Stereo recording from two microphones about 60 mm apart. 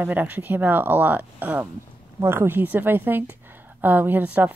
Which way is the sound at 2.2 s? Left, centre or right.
Right.